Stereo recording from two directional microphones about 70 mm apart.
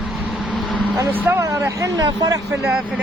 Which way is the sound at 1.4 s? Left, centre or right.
Right.